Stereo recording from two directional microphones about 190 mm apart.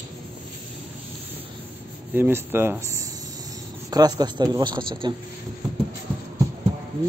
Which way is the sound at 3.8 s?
20° right (ahead or behind).